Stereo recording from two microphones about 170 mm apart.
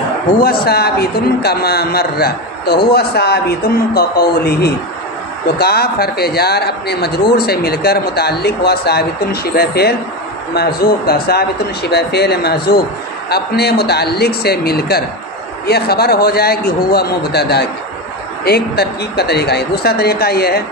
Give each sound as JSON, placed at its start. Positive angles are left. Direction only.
{"t": 0.4, "sound": "a man's voice", "side_deg": 65}